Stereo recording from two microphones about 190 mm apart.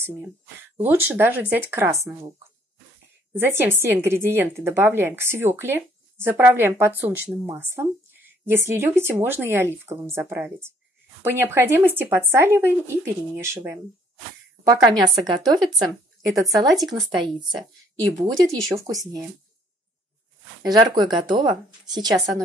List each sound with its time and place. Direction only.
0.7 s a woman's voice: 10° right (ahead or behind)
3.3 s a woman's voice: 10° right (ahead or behind)
15.1 s a woman's voice: 20° right (ahead or behind)
20.6 s speech: 20° right (ahead or behind)